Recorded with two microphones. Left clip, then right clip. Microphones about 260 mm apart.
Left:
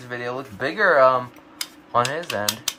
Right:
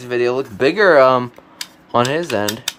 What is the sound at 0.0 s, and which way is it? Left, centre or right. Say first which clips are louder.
Speech: right 11 dB; right.